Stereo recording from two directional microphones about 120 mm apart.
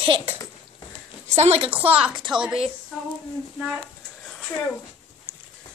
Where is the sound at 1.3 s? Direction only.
60° right (ahead or behind).